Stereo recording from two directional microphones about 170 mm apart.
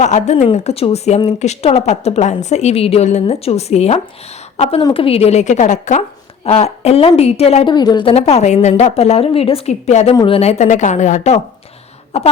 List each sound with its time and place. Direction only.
0.0 s a woman's voice: 40° left (ahead or behind)
4.8 s a woman's voice: 25° left (ahead or behind)
5.0 s a woman's voice: 35° left (ahead or behind)